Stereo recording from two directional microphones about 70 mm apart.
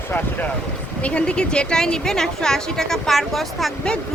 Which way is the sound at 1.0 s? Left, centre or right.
Centre.